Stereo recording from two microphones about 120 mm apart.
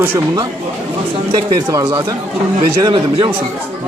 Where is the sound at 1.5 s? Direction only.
30° right (ahead or behind).